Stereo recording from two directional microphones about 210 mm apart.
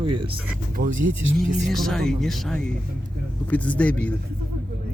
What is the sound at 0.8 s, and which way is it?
Speech, 45° right (ahead or behind).